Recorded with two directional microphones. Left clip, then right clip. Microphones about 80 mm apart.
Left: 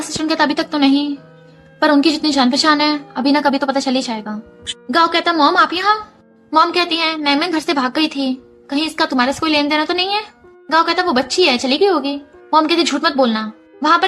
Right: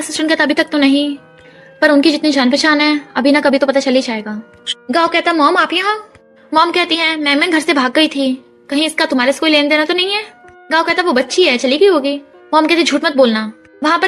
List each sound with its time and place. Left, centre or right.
0.2 s a woman's voice: right